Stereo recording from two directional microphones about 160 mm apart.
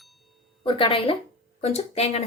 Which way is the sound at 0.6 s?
35° left (ahead or behind).